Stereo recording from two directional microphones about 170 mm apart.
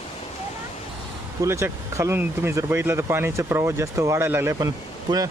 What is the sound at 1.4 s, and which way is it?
Speech, 15° right (ahead or behind).